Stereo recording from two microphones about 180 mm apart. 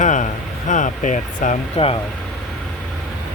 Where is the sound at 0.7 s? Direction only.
45° left (ahead or behind).